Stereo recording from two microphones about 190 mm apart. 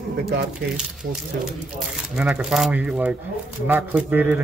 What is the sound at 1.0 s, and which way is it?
Speech, 60° right (ahead or behind).